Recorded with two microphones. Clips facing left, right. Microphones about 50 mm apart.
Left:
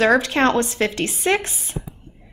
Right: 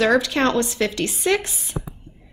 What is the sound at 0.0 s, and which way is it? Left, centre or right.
Speech, left.